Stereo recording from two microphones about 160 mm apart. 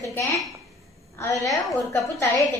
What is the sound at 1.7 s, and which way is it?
Speech, 20° left (ahead or behind).